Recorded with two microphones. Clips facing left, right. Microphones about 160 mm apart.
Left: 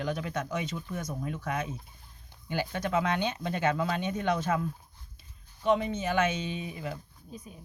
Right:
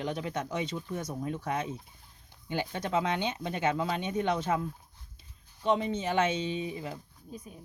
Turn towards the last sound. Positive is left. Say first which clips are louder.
# right 2 dB
turn(degrees=-30)  # may be behind; listen again after turning